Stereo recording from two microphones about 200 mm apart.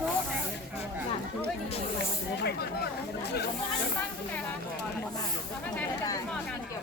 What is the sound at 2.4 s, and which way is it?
Vehicle, 55° left (ahead or behind).